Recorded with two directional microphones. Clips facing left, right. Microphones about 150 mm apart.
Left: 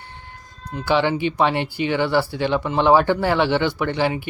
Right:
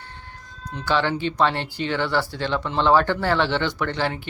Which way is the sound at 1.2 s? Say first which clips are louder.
Left 2 dB; 15° left (ahead or behind).